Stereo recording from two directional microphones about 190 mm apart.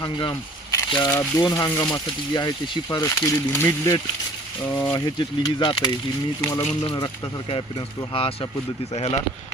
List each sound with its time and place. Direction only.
0.0 s speech: 20° left (ahead or behind)
8.1 s speech: 30° left (ahead or behind)